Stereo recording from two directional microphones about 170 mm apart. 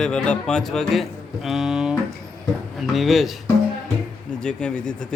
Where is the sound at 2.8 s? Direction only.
Centre (ahead or behind).